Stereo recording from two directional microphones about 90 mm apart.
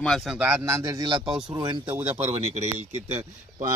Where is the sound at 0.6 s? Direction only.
35° right (ahead or behind).